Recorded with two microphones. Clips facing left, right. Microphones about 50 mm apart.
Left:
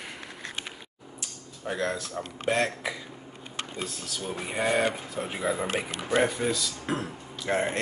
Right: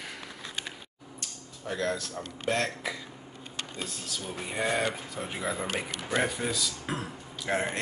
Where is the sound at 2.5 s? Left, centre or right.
Centre.